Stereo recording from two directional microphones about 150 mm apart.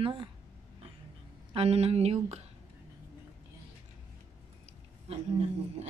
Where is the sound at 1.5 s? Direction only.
45° right (ahead or behind).